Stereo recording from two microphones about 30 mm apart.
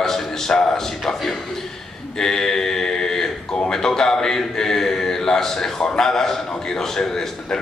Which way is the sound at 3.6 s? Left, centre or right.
Centre.